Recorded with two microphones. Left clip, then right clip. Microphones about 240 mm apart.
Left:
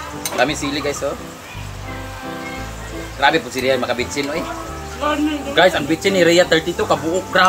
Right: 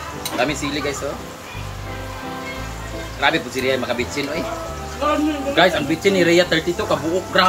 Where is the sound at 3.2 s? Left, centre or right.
Left.